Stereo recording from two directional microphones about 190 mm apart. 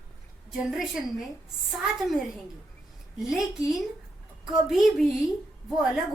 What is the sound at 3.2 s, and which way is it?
A woman's voice, centre (ahead or behind).